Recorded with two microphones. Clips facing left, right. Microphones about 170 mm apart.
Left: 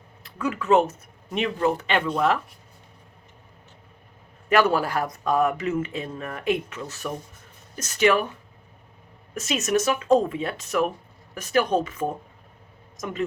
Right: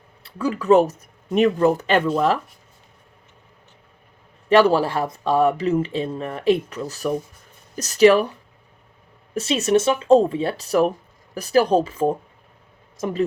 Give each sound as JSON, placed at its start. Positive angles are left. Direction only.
{"t": 0.2, "sound": "speech", "side_deg": -30}
{"t": 4.4, "sound": "speech", "side_deg": -30}
{"t": 9.3, "sound": "speech", "side_deg": -30}